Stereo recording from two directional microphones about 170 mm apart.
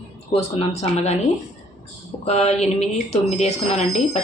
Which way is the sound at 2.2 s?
40° left (ahead or behind).